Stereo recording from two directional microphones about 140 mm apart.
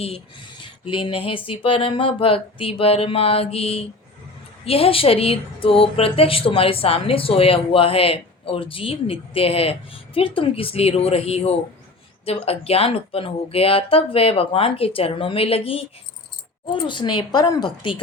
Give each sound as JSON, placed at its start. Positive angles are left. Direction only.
{"t": 0.6, "sound": "speech", "side_deg": 35}